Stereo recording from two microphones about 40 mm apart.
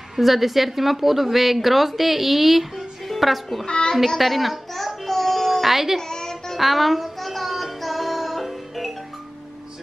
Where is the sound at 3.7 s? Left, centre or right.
Left.